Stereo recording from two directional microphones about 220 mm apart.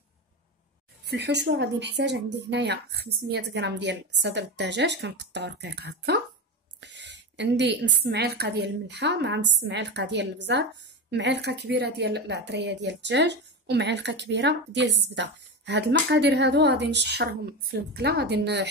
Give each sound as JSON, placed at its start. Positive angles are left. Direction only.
{"t": 1.0, "sound": "a woman's voice", "side_deg": -50}
{"t": 6.8, "sound": "a sound", "side_deg": -55}
{"t": 8.0, "sound": "a woman's voice", "side_deg": -45}